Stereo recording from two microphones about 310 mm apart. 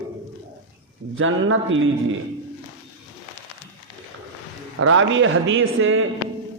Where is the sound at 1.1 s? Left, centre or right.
Right.